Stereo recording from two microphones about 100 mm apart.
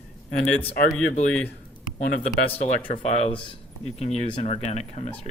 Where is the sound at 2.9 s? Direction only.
90° left; by 3.5 s 60° left (ahead or behind).